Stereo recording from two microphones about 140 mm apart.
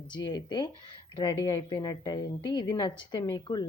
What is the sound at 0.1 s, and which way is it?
A woman's voice, 30° left (ahead or behind).